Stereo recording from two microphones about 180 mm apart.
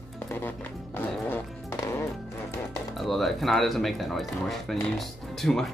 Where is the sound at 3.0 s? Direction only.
Centre (ahead or behind).